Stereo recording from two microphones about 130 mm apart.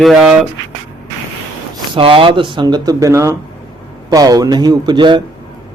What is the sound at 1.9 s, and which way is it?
Speech, 45° right (ahead or behind).